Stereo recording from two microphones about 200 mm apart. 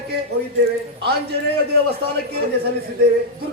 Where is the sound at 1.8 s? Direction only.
55° right (ahead or behind).